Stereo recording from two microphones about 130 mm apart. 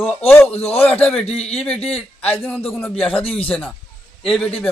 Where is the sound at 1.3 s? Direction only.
50° left (ahead or behind).